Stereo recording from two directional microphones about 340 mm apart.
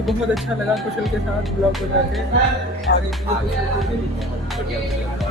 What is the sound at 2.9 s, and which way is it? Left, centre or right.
Music, left.